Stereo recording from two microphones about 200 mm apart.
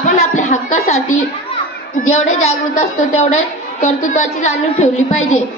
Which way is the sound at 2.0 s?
35° left (ahead or behind).